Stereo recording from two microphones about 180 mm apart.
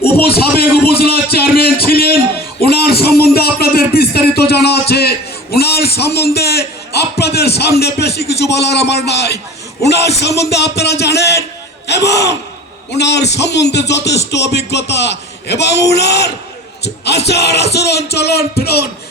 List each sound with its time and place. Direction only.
0.2 s a sound: 60° left (ahead or behind)
8.9 s a man's voice: 65° left (ahead or behind)
17.2 s music: 65° left (ahead or behind)